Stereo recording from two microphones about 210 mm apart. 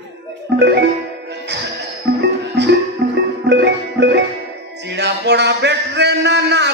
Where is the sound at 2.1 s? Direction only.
60° right (ahead or behind).